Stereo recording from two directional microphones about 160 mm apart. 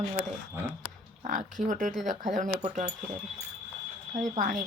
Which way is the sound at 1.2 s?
50° right (ahead or behind).